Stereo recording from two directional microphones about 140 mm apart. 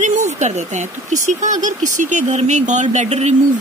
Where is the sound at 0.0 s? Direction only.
60° right (ahead or behind).